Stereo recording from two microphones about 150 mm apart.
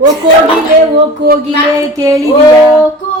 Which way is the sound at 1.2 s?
90° right.